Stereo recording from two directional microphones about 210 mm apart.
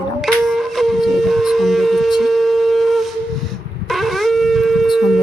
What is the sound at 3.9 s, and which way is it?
Shofar, centre (ahead or behind).